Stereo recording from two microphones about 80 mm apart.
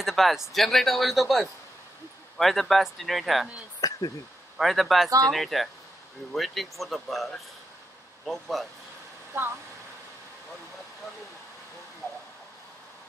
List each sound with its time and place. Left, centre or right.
0.0 s speech: centre
3.8 s a sound: left
4.6 s speech: centre
9.3 s speech: right